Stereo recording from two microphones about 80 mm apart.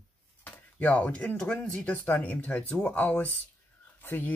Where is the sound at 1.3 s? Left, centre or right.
Centre.